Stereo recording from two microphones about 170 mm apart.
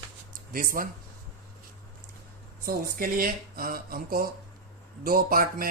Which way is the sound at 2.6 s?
55° right (ahead or behind).